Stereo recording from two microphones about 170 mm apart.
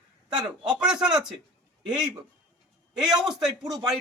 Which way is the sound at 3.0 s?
5° right (ahead or behind).